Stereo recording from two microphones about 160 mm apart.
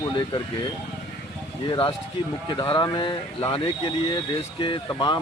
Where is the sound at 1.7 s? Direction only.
30° left (ahead or behind).